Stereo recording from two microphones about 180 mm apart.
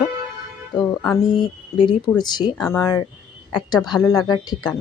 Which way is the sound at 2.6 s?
10° left (ahead or behind).